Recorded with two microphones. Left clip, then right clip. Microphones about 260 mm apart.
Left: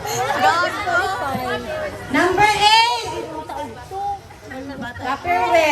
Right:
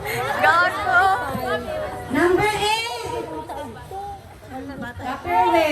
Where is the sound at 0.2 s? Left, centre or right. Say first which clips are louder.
Even; centre.